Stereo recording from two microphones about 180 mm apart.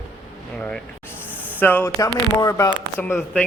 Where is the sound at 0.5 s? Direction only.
5° left (ahead or behind).